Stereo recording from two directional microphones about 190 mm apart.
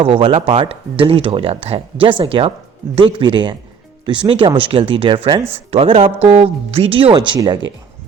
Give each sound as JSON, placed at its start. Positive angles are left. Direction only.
{"t": 0.0, "sound": "speech", "side_deg": -30}